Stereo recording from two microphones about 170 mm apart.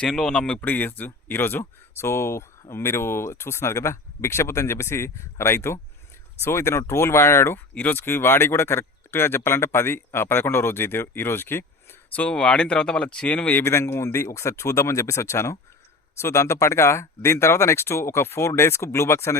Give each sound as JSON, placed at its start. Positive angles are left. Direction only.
{"t": 0.0, "sound": "speech", "side_deg": 5}